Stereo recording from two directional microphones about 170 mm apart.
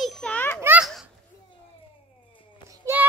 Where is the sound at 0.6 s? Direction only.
10° right (ahead or behind).